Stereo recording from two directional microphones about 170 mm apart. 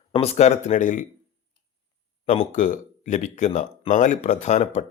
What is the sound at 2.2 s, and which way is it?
Speech, 45° left (ahead or behind).